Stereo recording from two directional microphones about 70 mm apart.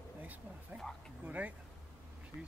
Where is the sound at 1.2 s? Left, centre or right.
Right.